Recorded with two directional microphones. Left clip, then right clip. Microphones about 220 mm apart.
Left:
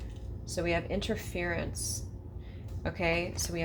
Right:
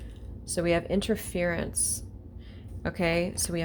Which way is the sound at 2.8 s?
50° right (ahead or behind).